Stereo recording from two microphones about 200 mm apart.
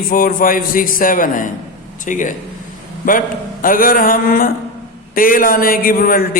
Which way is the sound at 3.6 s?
45° left (ahead or behind).